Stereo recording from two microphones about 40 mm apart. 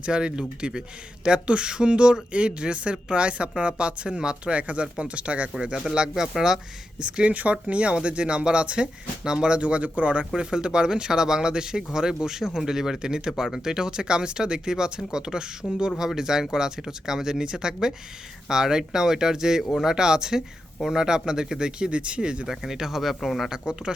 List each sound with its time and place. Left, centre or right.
0.0 s speech: right
4.5 s speech: right
6.3 s speech: centre
7.0 s speech: right
22.4 s speech: centre
23.5 s speech: right